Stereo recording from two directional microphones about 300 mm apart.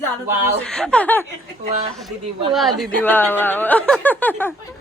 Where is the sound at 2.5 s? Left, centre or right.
Centre.